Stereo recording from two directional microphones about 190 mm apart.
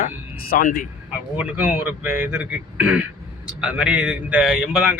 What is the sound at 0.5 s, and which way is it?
Speech, 50° left (ahead or behind).